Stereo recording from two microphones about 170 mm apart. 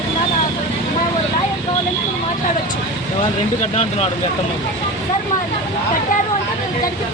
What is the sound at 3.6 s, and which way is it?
Speech, 40° left (ahead or behind).